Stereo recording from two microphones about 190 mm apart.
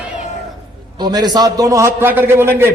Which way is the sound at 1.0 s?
20° right (ahead or behind).